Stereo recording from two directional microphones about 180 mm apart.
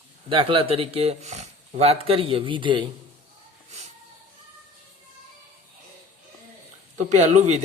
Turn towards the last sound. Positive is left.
turn(degrees=-40)  # may be behind; listen again after turning